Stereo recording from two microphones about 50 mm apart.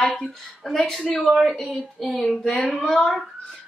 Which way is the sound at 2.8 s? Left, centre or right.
Centre.